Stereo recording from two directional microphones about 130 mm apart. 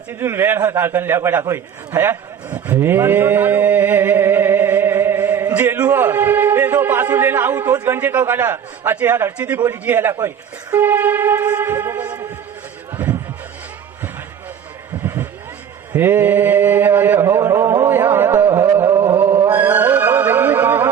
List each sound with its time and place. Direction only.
0.1 s a man's voice: 15° right (ahead or behind)
7.9 s mantra: 15° right (ahead or behind)
15.0 s vehicle: 15° right (ahead or behind)
15.9 s mantra: 15° right (ahead or behind)
18.7 s a sound: 20° right (ahead or behind)
19.5 s music: 15° right (ahead or behind)